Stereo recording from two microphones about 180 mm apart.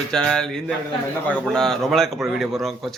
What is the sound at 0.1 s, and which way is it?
Speech, 5° left (ahead or behind).